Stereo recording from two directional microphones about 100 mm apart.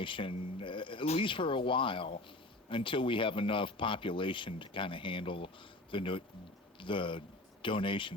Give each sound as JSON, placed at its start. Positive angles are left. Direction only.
{"t": 0.0, "sound": "speech", "side_deg": 55}
{"t": 1.3, "sound": "speech", "side_deg": 60}